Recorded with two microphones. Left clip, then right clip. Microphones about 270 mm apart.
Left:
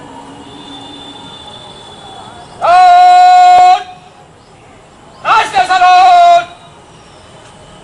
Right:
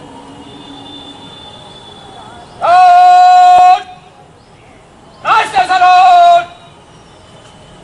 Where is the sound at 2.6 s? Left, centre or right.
Centre.